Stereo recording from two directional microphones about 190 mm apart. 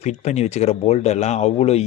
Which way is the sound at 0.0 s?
35° left (ahead or behind).